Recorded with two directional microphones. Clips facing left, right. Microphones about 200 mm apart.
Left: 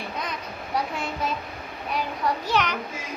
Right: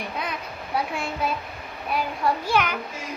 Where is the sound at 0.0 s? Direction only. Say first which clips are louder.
Right 1 dB; 5° right (ahead or behind).